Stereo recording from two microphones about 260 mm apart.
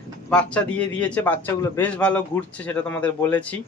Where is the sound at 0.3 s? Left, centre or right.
Centre.